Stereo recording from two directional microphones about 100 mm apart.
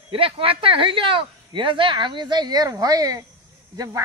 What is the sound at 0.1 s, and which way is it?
A woman's voice, 65° right (ahead or behind).